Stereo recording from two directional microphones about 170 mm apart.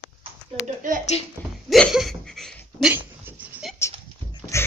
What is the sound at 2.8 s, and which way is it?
Dog, 10° right (ahead or behind).